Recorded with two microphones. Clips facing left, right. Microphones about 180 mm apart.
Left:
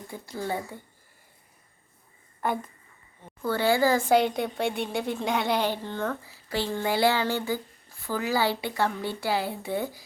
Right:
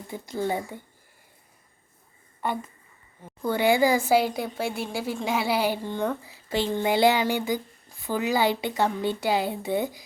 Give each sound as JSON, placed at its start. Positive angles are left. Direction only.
{"t": 0.1, "sound": "speech", "side_deg": -20}
{"t": 3.4, "sound": "speech", "side_deg": -15}